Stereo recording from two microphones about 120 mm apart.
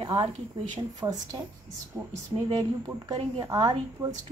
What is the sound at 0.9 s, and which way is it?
Speech, 30° right (ahead or behind).